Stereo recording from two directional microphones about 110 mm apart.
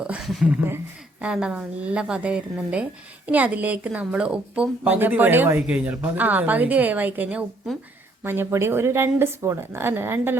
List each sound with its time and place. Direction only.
0.0 s a woman's voice: 5° right (ahead or behind); by 10.3 s 20° right (ahead or behind)